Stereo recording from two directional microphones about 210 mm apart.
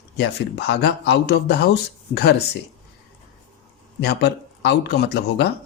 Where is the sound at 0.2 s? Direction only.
55° left (ahead or behind).